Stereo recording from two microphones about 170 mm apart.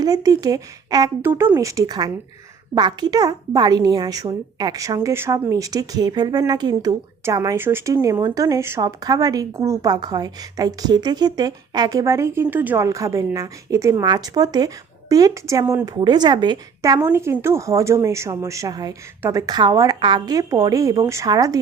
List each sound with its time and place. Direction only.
0.0 s a woman's voice: 20° right (ahead or behind)